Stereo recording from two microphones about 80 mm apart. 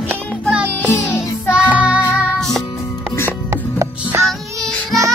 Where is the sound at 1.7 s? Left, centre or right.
Centre.